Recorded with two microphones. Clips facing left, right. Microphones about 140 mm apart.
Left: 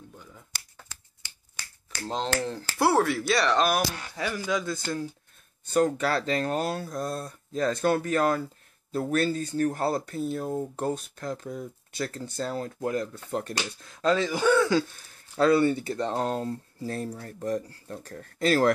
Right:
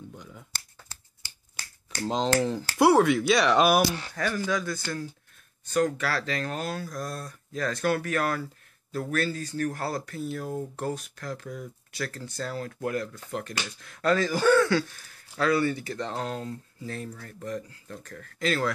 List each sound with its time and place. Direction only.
0.1 s speech: centre (ahead or behind)
2.2 s speech: centre (ahead or behind)
4.1 s speech: 15° left (ahead or behind)
15.3 s speech: 25° left (ahead or behind)